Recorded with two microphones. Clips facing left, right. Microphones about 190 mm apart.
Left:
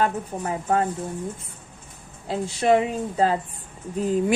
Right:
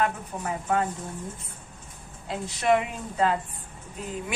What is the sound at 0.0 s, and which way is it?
Speech, 35° left (ahead or behind).